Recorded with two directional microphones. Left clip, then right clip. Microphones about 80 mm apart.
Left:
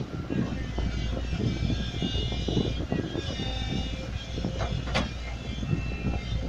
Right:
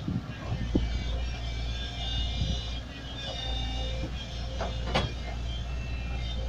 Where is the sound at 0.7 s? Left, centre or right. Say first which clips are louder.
Right 1 dB; centre.